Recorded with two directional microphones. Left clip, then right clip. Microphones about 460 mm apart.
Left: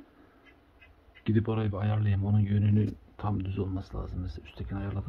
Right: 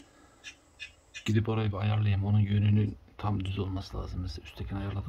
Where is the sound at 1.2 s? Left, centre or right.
Centre.